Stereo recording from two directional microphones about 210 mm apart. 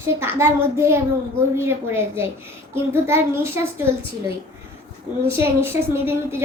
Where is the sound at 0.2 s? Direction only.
10° right (ahead or behind).